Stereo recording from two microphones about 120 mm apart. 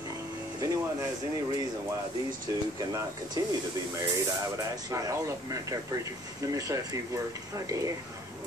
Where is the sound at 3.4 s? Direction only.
30° right (ahead or behind).